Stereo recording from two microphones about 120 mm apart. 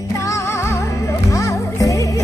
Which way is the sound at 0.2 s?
25° left (ahead or behind).